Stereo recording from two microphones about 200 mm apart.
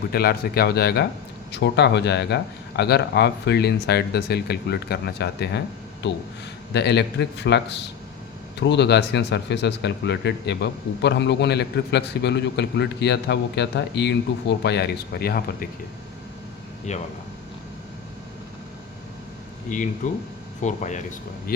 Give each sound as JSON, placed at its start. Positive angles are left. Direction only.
{"t": 0.1, "sound": "speech", "side_deg": 50}
{"t": 16.9, "sound": "speech", "side_deg": 35}
{"t": 20.0, "sound": "speech", "side_deg": 40}